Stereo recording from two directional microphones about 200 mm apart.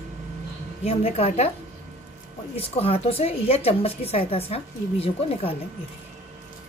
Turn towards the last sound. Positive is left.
turn(degrees=30)  # may be behind; listen again after turning